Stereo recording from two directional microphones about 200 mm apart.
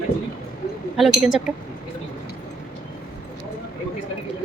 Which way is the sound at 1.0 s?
Centre (ahead or behind).